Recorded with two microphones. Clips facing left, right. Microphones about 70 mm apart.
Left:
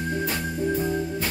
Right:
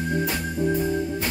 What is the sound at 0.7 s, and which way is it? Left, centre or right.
Music, centre.